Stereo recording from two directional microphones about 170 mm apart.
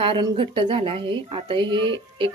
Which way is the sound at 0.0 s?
30° right (ahead or behind).